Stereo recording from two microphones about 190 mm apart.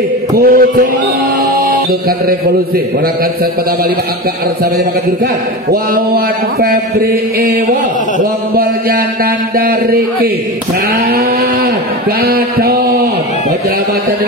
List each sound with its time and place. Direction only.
0.4 s mantra: 50° right (ahead or behind)
1.7 s music: 50° right (ahead or behind)
5.7 s mantra: 50° right (ahead or behind)
12.2 s a sound: 50° right (ahead or behind)